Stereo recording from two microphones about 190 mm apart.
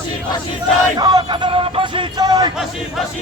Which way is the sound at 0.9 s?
25° right (ahead or behind).